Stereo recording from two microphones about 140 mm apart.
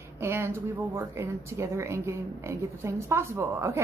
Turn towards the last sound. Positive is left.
turn(degrees=-20)  # may be behind; listen again after turning